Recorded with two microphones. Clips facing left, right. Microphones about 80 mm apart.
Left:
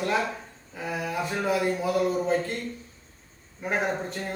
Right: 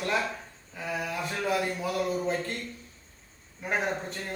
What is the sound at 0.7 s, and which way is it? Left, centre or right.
Speech, centre.